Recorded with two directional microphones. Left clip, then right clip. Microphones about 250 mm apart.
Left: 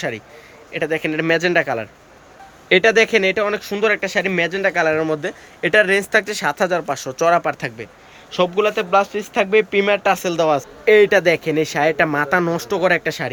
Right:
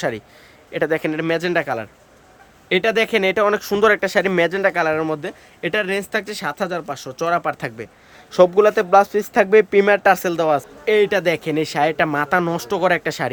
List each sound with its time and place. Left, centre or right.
0.7 s speech: centre
8.3 s speech: right